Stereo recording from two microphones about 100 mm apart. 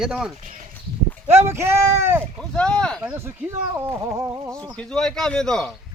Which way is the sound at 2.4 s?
10° left (ahead or behind).